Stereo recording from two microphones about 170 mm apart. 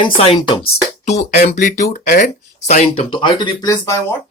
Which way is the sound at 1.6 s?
50° left (ahead or behind).